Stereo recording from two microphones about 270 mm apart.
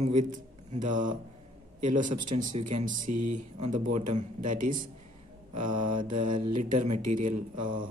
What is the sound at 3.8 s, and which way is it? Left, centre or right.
Speech, right.